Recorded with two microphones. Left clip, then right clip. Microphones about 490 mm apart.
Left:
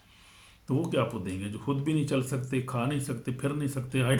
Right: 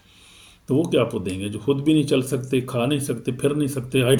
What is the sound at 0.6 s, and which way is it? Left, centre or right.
Speech, left.